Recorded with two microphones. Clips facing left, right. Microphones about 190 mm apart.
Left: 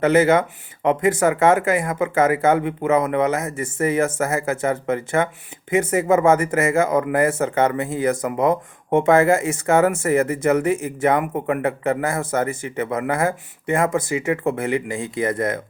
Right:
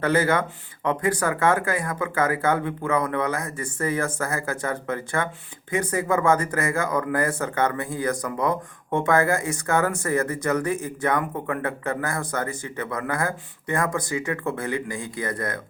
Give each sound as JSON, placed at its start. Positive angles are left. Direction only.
{"t": 0.0, "sound": "speech", "side_deg": 20}